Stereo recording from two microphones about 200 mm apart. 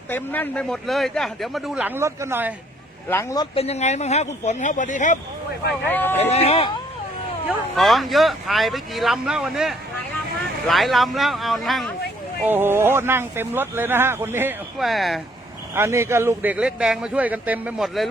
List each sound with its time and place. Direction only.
0.1 s speech: 10° left (ahead or behind); by 2.5 s 10° right (ahead or behind)
3.1 s speech: 15° left (ahead or behind)
3.5 s speech: 30° left (ahead or behind)
5.9 s speech: 10° left (ahead or behind)
6.1 s speech: 30° left (ahead or behind)
7.8 s speech: centre (ahead or behind)
12.5 s speech: 10° right (ahead or behind)
15.7 s speech: 10° right (ahead or behind)